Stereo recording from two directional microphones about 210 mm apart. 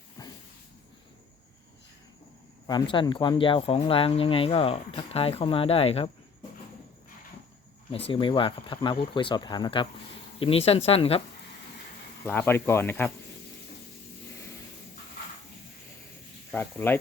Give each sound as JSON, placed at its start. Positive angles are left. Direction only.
{"t": 0.2, "sound": "a sound", "side_deg": 15}
{"t": 2.6, "sound": "speech", "side_deg": 20}
{"t": 7.9, "sound": "speech", "side_deg": 25}
{"t": 12.2, "sound": "speech", "side_deg": 10}
{"t": 16.5, "sound": "speech", "side_deg": 10}